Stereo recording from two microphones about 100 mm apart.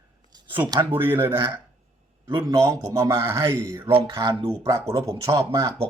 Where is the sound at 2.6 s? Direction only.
35° right (ahead or behind).